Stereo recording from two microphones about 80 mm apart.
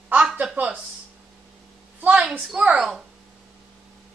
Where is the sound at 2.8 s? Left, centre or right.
Centre.